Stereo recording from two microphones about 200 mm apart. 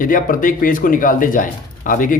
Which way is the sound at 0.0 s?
45° left (ahead or behind).